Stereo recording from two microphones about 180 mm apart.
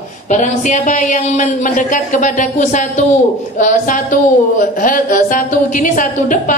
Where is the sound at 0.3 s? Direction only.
40° left (ahead or behind).